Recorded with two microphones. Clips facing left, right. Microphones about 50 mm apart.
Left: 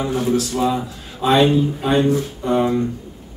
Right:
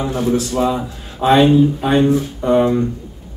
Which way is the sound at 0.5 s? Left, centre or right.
Centre.